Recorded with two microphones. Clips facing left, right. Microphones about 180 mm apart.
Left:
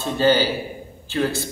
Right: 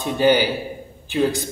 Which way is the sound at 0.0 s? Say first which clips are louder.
Right 1 dB; 15° right (ahead or behind).